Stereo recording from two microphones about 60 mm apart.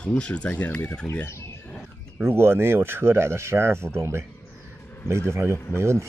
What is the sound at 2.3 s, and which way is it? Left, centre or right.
Speech, right.